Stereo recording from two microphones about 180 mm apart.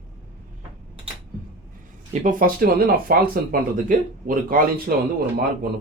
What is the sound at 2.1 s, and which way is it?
Speech, 50° right (ahead or behind).